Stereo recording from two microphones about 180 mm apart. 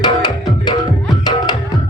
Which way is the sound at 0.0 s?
25° left (ahead or behind).